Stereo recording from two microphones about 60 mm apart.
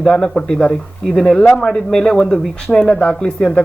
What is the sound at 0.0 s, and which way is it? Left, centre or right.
Speech, centre.